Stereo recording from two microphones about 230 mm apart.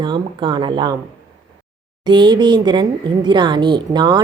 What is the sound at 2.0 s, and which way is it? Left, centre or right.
A woman's voice, centre.